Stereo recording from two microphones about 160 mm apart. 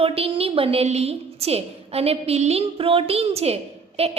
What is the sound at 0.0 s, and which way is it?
A woman's voice, 35° right (ahead or behind).